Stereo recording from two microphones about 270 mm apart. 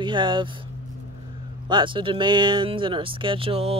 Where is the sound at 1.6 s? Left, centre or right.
Centre.